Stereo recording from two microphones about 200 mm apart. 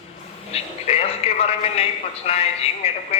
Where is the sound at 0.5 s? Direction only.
30° left (ahead or behind).